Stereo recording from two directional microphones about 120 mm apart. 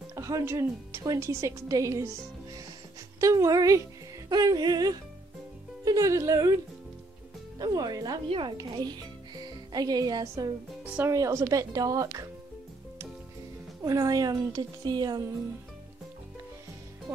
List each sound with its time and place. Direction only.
0.1 s a woman's voice: 25° right (ahead or behind)
7.5 s a woman's voice: 35° right (ahead or behind)
13.8 s a woman's voice: 30° right (ahead or behind)